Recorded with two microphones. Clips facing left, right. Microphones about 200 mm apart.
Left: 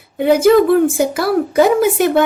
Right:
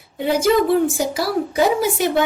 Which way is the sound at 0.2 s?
55° left (ahead or behind).